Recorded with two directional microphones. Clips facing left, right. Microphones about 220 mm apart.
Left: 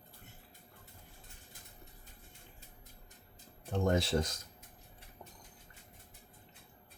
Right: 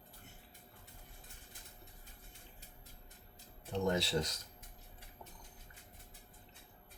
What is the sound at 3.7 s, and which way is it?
Speech, 50° left (ahead or behind).